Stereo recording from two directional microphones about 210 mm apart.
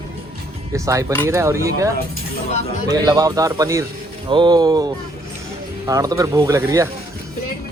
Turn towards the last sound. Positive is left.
turn(degrees=-10)  # may be behind; listen again after turning